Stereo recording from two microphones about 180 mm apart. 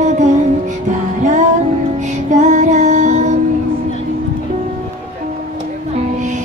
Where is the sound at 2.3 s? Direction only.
40° right (ahead or behind).